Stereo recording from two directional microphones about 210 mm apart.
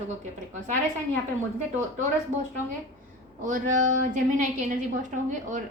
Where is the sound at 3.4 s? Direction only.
35° right (ahead or behind).